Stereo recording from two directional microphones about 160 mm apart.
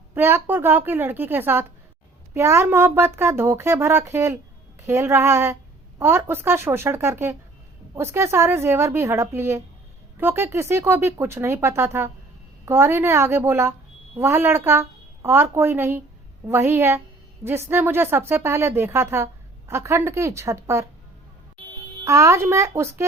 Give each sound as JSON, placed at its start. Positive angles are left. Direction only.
{"t": 0.1, "sound": "a woman's voice", "side_deg": -15}
{"t": 22.0, "sound": "a woman's voice", "side_deg": -20}